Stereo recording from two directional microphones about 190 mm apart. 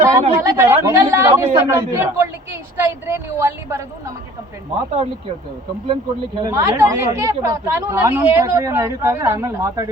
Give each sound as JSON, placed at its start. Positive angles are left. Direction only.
{"t": 0.0, "sound": "a sound", "side_deg": -15}
{"t": 1.4, "sound": "speech", "side_deg": -15}
{"t": 6.4, "sound": "speech", "side_deg": -20}